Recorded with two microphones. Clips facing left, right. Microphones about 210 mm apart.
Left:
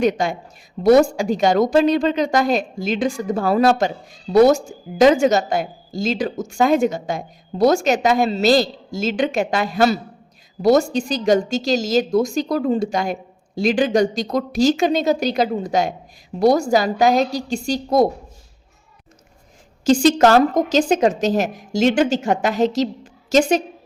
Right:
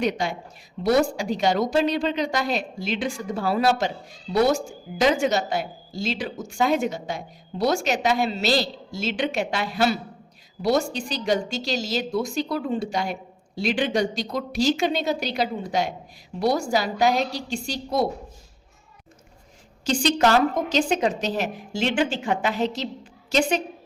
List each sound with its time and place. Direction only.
0.0 s a woman's voice: 45° left (ahead or behind)
19.8 s a woman's voice: 45° left (ahead or behind)